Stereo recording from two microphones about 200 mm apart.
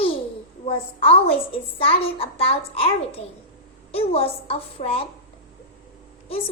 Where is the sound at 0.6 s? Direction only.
30° left (ahead or behind).